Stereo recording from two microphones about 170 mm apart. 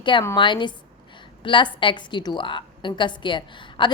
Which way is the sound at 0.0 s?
30° left (ahead or behind).